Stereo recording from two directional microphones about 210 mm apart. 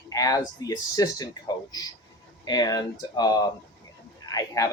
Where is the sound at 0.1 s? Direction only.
15° left (ahead or behind).